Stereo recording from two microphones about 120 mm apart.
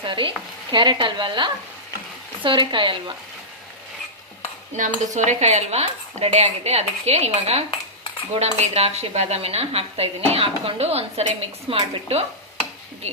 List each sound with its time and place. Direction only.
0.0 s stir: 45° right (ahead or behind)
4.8 s speech: 80° right; by 12.2 s 60° right (ahead or behind)